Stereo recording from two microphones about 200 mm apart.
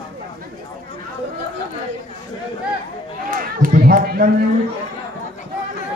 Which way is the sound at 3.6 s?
45° right (ahead or behind).